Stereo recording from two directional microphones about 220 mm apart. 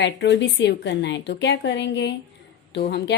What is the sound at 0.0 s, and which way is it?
Speech, 55° left (ahead or behind).